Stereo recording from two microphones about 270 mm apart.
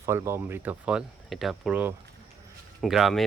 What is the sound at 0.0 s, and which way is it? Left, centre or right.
Speech, centre.